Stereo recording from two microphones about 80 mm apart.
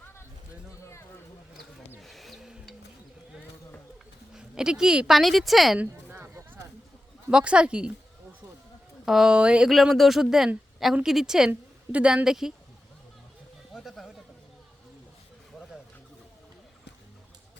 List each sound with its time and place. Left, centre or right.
2.0 s music: centre
4.4 s speech: centre
5.8 s a sound: right
7.3 s speech: centre
9.0 s speech: centre
9.6 s speech: centre
13.7 s a sound: centre